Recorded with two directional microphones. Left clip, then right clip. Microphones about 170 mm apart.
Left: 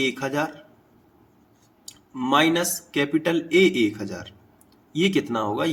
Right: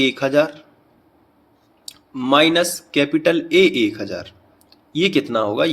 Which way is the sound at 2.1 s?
15° right (ahead or behind).